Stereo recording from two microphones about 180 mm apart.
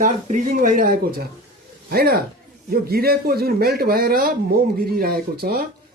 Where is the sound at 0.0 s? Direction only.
45° right (ahead or behind).